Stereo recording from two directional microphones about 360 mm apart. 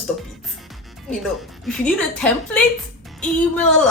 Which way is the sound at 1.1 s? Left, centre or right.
Centre.